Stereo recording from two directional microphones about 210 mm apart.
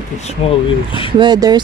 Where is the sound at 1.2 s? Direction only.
20° right (ahead or behind).